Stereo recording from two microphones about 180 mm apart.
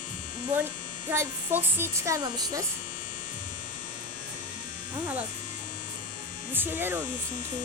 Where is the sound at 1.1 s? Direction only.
10° right (ahead or behind).